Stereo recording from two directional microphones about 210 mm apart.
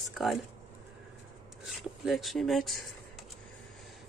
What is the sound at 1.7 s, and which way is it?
Speech, centre (ahead or behind).